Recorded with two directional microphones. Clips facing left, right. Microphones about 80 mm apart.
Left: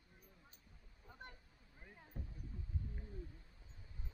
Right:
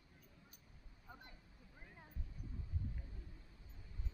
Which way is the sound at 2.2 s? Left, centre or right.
Left.